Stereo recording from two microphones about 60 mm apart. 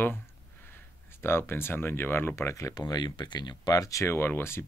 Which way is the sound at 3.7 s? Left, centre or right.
Left.